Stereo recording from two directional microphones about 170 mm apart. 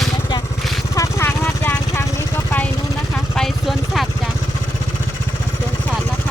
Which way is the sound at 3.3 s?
Centre (ahead or behind).